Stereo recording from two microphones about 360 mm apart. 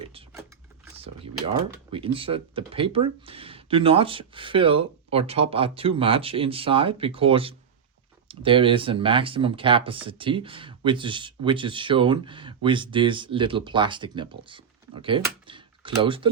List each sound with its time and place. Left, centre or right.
0.0 s mechanisms: centre
0.9 s a sound: centre
1.9 s speech: centre